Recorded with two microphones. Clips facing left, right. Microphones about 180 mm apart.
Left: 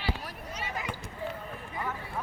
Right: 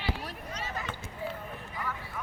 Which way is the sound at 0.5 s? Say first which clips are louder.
Left 2 dB; 15° left (ahead or behind).